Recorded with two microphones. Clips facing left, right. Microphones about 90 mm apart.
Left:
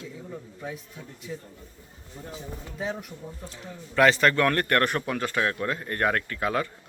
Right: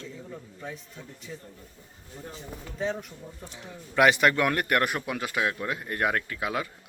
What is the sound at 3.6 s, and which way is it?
A man's voice, 15° right (ahead or behind).